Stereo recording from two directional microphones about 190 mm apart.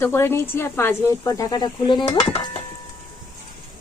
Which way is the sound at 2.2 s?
25° left (ahead or behind).